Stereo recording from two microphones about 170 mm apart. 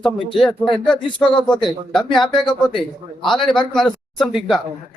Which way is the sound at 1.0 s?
30° left (ahead or behind).